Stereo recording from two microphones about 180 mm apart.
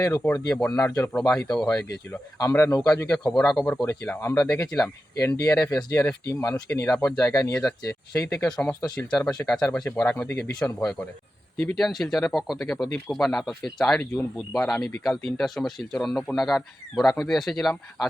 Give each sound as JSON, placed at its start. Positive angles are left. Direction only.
{"t": 0.0, "sound": "speech", "side_deg": 15}
{"t": 1.5, "sound": "speech", "side_deg": 5}
{"t": 3.1, "sound": "speech", "side_deg": 5}
{"t": 5.1, "sound": "speech", "side_deg": 15}
{"t": 9.0, "sound": "speech", "side_deg": 5}